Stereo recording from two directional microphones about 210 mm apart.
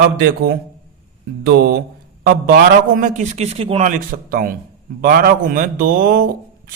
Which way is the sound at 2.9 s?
35° right (ahead or behind).